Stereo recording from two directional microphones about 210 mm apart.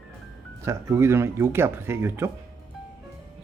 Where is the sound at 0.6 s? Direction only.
15° right (ahead or behind).